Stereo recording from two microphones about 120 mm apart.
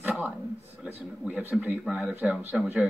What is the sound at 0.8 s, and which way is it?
Speech, 15° right (ahead or behind).